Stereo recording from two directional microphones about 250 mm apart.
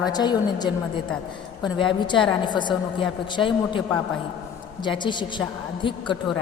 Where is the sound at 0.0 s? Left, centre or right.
Centre.